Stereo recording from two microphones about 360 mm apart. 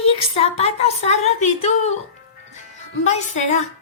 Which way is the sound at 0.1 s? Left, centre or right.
Centre.